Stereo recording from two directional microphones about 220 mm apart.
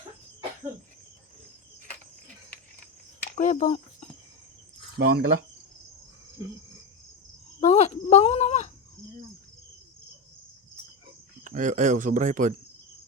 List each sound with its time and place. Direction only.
3.3 s cricket: 35° left (ahead or behind)
4.9 s speech: 45° right (ahead or behind)
7.6 s speech: 30° left (ahead or behind)
11.4 s speech: 35° right (ahead or behind)